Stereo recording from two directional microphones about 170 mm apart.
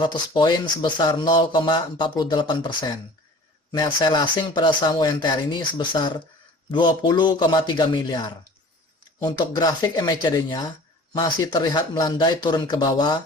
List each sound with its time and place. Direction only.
0.0 s speech: 25° left (ahead or behind)